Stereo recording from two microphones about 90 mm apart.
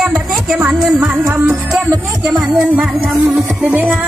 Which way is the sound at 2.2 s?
5° right (ahead or behind).